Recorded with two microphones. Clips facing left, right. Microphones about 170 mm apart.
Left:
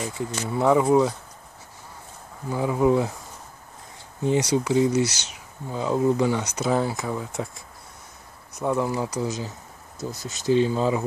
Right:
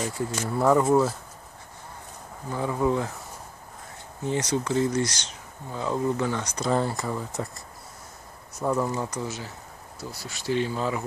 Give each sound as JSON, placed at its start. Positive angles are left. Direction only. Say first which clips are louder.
{"t": 0.5, "sound": "speech", "louder": "left 2 dB", "side_deg": 5}
{"t": 2.5, "sound": "speech", "louder": "left 4 dB", "side_deg": 15}
{"t": 4.2, "sound": "speech", "louder": "left 5 dB", "side_deg": 15}
{"t": 8.9, "sound": "speech", "louder": "left 4 dB", "side_deg": 15}